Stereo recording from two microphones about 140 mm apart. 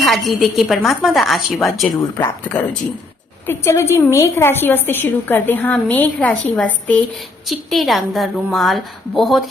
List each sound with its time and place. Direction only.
0.0 s a woman's voice: centre (ahead or behind)
2.0 s a woman's voice: 25° left (ahead or behind); by 9.4 s centre (ahead or behind)